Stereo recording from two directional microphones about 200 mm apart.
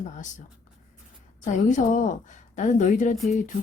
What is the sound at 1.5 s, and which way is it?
A woman's voice, 40° left (ahead or behind).